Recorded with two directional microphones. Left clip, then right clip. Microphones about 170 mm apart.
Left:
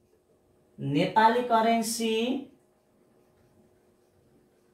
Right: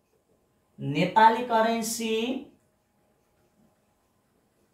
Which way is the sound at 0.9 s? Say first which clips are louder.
Right 3 dB; centre (ahead or behind).